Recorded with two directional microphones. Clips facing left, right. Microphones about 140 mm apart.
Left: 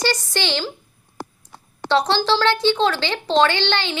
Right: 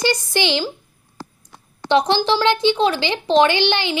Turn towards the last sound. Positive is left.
turn(degrees=-15)  # may be behind; listen again after turning